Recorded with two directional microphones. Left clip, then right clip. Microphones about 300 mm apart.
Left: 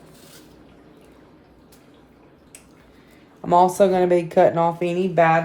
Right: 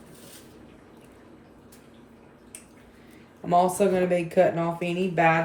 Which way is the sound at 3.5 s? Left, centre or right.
Left.